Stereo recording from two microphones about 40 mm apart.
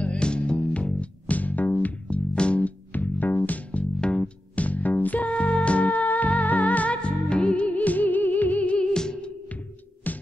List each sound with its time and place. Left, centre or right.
0.0 s music: left
0.7 s music: left
2.6 s music: left
4.0 s music: left
4.6 s music: left
7.5 s music: left
8.7 s music: centre
10.1 s music: left